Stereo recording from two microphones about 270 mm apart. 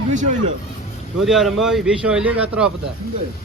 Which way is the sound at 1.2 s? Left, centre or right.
Centre.